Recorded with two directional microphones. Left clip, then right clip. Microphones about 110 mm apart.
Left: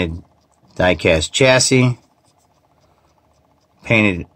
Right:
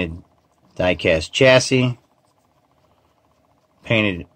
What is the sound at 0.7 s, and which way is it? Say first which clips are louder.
Speech: left 3 dB; 20° left (ahead or behind).